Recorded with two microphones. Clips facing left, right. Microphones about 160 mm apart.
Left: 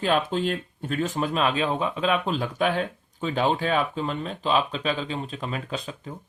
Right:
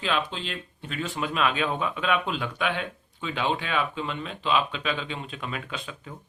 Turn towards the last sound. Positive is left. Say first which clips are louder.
# left 4 dB
turn(degrees=35)  # may be behind; listen again after turning